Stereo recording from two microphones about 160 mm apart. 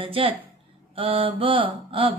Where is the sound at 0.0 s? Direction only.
35° right (ahead or behind).